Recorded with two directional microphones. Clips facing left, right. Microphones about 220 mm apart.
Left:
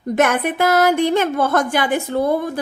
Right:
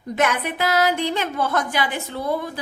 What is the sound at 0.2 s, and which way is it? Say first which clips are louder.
A woman's voice: left 5 dB; 50° left (ahead or behind).